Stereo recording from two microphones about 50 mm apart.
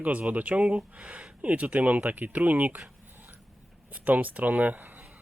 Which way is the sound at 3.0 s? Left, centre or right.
Right.